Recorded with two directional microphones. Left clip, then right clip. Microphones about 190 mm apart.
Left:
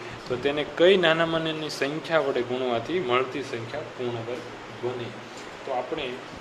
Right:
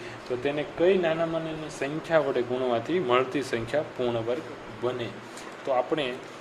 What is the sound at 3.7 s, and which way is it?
Speech, 35° right (ahead or behind).